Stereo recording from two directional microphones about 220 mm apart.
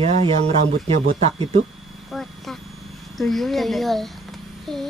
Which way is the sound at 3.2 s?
Centre (ahead or behind).